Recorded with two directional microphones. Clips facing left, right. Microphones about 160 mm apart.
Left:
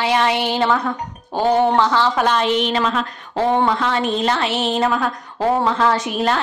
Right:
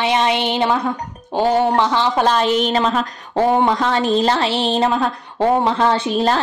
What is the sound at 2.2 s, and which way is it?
A woman's voice, 40° right (ahead or behind).